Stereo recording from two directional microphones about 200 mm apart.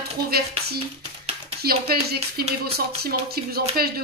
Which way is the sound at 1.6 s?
50° right (ahead or behind).